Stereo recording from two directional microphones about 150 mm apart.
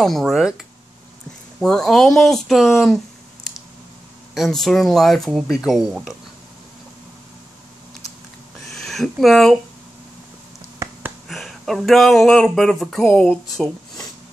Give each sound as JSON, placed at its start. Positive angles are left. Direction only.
{"t": 0.0, "sound": "speech", "side_deg": 0}
{"t": 1.6, "sound": "speech", "side_deg": 5}
{"t": 4.4, "sound": "speech", "side_deg": 0}
{"t": 8.6, "sound": "a sound", "side_deg": 0}
{"t": 10.8, "sound": "a sound", "side_deg": -15}
{"t": 11.2, "sound": "speech", "side_deg": 0}